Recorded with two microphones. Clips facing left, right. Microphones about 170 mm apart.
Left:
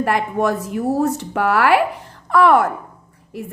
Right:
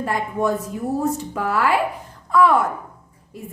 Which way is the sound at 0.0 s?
85° left.